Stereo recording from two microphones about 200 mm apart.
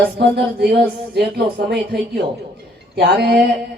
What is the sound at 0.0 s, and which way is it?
A man's voice, 55° right (ahead or behind).